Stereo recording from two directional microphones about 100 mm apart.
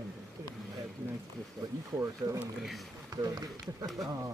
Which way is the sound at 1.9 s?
30° right (ahead or behind).